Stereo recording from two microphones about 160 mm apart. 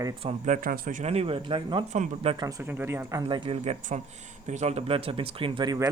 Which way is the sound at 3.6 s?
45° right (ahead or behind).